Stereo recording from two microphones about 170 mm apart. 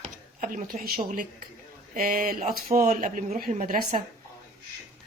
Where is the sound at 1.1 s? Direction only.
50° right (ahead or behind).